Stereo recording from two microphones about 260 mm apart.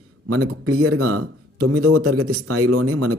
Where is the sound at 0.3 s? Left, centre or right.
Right.